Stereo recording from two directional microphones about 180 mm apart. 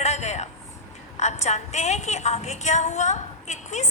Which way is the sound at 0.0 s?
40° left (ahead or behind).